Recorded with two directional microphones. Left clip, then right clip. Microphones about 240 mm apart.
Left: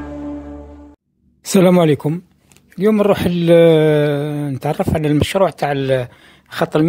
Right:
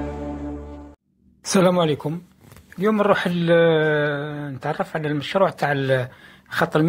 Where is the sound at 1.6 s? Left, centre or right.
Left.